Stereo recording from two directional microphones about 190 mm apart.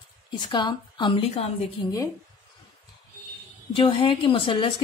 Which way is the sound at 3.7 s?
25° left (ahead or behind).